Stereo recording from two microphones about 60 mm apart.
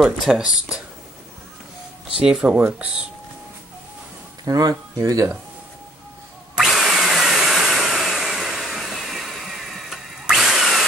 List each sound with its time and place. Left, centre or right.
0.0 s speech: centre
2.4 s speech: right
4.5 s speech: right
6.5 s a sound: centre
10.2 s drill: centre